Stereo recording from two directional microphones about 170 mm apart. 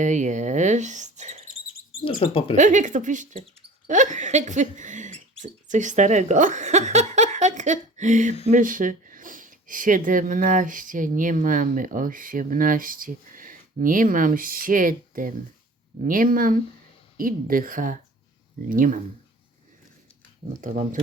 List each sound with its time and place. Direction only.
0.0 s speech: 45° right (ahead or behind)
2.2 s speech: 30° left (ahead or behind)
2.6 s a woman's voice: 45° right (ahead or behind)
20.6 s speech: 50° right (ahead or behind)